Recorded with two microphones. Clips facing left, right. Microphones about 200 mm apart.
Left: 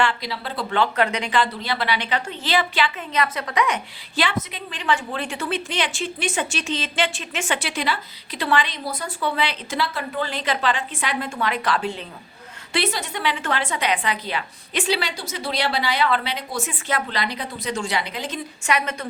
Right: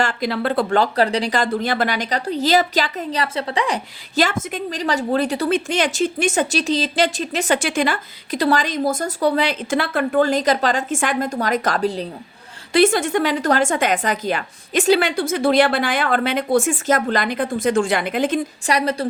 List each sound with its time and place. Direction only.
0.0 s speech: 45° right (ahead or behind)
12.7 s speech: 50° right (ahead or behind)
18.6 s a woman's voice: 35° right (ahead or behind)